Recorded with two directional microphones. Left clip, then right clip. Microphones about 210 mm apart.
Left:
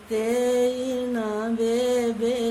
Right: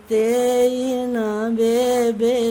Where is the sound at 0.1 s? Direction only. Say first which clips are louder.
Right 5 dB; 50° right (ahead or behind).